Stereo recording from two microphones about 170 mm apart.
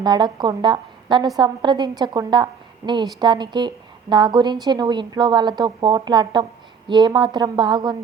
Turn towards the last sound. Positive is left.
turn(degrees=-25)  # may be behind; listen again after turning